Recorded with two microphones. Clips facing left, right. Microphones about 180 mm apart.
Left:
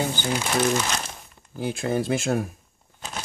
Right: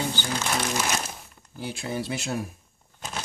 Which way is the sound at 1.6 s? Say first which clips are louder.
Left 6 dB; 50° left (ahead or behind).